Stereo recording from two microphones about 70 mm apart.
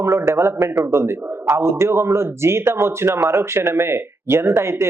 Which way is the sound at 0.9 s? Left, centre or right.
Right.